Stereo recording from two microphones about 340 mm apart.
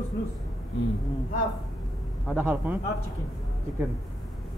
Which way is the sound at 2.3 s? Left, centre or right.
Centre.